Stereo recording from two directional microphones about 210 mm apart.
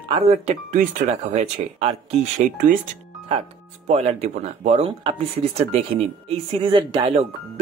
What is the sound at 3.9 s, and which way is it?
Speech, 30° right (ahead or behind).